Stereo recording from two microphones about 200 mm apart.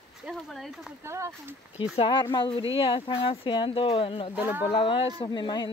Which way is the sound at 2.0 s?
25° left (ahead or behind).